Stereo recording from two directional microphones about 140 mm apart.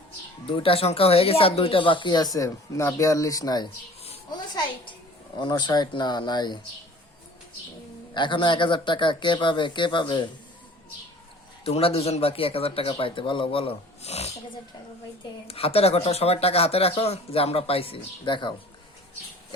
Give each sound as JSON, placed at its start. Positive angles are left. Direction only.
{"t": 0.4, "sound": "speech", "side_deg": 40}
{"t": 5.4, "sound": "speech", "side_deg": 30}
{"t": 8.1, "sound": "speech", "side_deg": 35}
{"t": 11.6, "sound": "speech", "side_deg": 45}
{"t": 15.4, "sound": "speech", "side_deg": 45}